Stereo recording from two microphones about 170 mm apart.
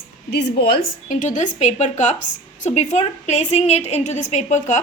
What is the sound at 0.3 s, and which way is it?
A woman's voice, 70° left (ahead or behind).